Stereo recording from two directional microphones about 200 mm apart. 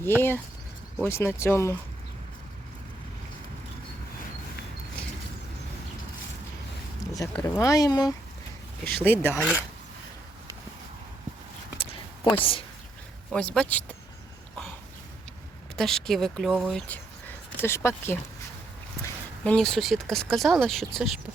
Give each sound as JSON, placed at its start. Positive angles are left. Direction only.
{"t": 0.0, "sound": "speech", "side_deg": 10}
{"t": 7.1, "sound": "speech", "side_deg": 15}
{"t": 8.8, "sound": "speech", "side_deg": -55}
{"t": 9.0, "sound": "speech", "side_deg": 10}
{"t": 12.4, "sound": "a woman's voice", "side_deg": 25}
{"t": 13.3, "sound": "speech", "side_deg": 5}
{"t": 15.7, "sound": "speech", "side_deg": 0}
{"t": 16.8, "sound": "speech", "side_deg": 10}